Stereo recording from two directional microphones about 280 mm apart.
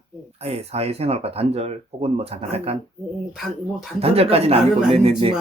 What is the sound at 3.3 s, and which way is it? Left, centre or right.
Speech, centre.